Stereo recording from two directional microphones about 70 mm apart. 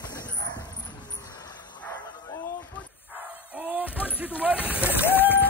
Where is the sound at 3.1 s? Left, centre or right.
Centre.